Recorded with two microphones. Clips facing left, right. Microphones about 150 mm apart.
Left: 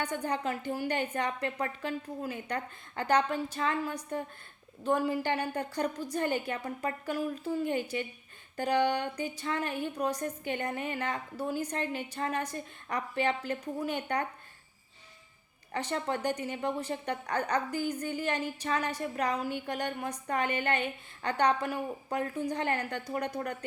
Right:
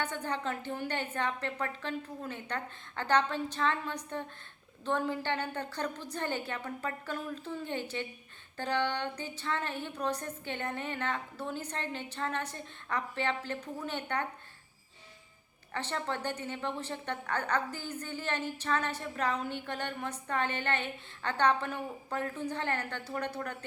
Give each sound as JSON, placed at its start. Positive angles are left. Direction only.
{"t": 0.0, "sound": "a woman's voice", "side_deg": 10}
{"t": 15.7, "sound": "a woman's voice", "side_deg": 15}